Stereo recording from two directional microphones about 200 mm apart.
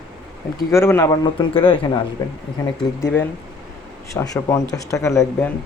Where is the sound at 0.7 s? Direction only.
10° left (ahead or behind).